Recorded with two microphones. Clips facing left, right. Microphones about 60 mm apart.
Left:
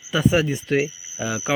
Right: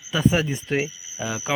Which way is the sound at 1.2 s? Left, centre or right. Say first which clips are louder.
Left 2 dB; centre.